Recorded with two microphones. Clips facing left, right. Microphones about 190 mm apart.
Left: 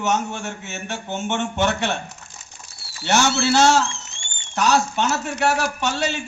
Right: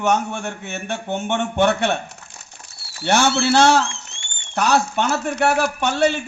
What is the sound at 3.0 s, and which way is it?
A man's voice, 55° right (ahead or behind).